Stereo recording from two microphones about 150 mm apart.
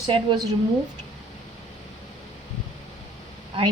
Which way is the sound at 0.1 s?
30° right (ahead or behind).